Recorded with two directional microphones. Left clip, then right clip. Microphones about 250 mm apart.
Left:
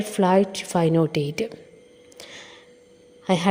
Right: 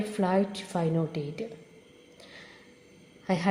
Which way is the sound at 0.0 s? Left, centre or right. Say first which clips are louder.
Left 8 dB; left.